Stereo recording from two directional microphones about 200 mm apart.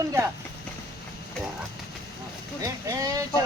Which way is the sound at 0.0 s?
15° right (ahead or behind).